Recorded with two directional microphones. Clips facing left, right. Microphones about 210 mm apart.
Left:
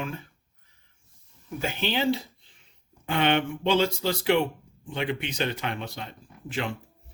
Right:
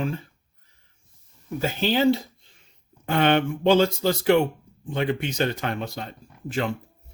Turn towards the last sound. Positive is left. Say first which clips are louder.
# right 5 dB
turn(degrees=-45)  # may be behind; listen again after turning